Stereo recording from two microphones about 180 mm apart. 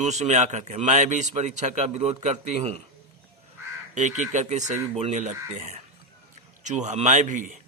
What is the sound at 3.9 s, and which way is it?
A man's voice, 40° right (ahead or behind).